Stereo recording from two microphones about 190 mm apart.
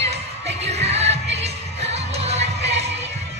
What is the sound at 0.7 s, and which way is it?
Music, 35° right (ahead or behind).